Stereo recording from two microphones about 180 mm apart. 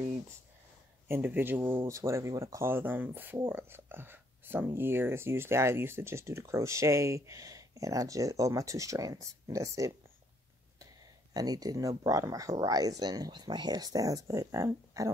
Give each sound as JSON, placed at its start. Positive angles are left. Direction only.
{"t": 1.0, "sound": "speech", "side_deg": -10}
{"t": 11.3, "sound": "speech", "side_deg": -20}